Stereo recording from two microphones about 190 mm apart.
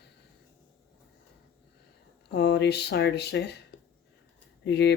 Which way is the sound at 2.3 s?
60° left (ahead or behind).